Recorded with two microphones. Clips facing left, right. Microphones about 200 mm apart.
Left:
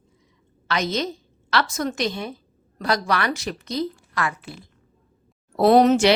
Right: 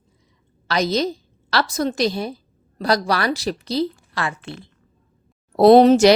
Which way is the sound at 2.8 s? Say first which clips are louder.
Right 3 dB; 35° right (ahead or behind).